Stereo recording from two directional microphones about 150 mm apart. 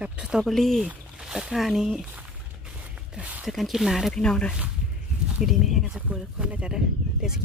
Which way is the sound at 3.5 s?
Centre (ahead or behind).